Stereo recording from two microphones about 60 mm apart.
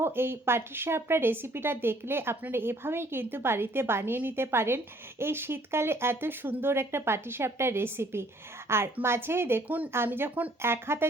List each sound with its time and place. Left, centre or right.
0.0 s speech: right
9.6 s speech: right